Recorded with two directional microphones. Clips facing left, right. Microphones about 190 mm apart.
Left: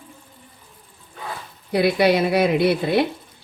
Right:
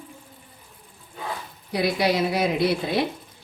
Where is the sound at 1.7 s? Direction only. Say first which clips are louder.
Left 5 dB; 60° left (ahead or behind).